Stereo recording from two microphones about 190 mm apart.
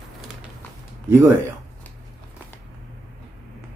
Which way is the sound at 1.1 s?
10° right (ahead or behind).